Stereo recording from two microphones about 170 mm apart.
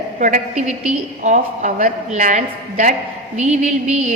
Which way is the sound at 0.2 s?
45° right (ahead or behind).